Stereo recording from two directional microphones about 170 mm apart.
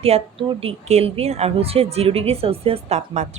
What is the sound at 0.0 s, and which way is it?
Speech, 35° right (ahead or behind).